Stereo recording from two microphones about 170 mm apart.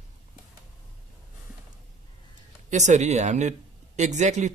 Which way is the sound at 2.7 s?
45° right (ahead or behind).